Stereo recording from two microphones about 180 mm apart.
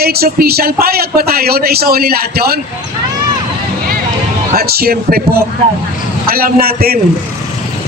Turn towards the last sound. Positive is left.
turn(degrees=-55)  # may be behind; listen again after turning